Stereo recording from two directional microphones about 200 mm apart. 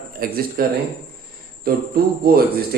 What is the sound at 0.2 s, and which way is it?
Speech, 50° right (ahead or behind).